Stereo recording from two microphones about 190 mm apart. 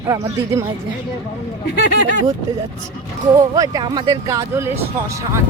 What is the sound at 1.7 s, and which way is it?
Speech, 60° left (ahead or behind).